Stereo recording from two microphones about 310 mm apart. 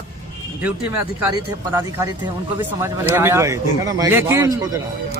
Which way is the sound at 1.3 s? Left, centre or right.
Centre.